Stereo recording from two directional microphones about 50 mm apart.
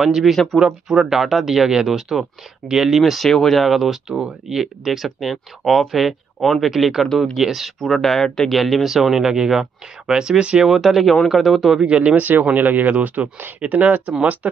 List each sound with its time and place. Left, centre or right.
0.0 s speech: centre
3.0 s speech: centre
7.8 s speech: centre
10.6 s speech: centre
11.8 s speech: centre
12.2 s speech: right